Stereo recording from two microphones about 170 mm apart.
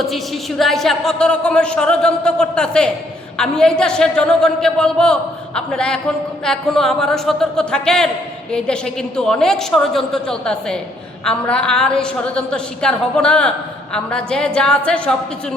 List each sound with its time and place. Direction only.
0.0 s speech: centre (ahead or behind)